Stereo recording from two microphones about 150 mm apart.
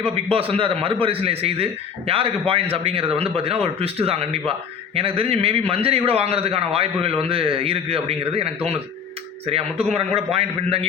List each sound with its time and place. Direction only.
0.0 s a man's voice: 40° right (ahead or behind)
9.5 s a man's voice: 40° right (ahead or behind)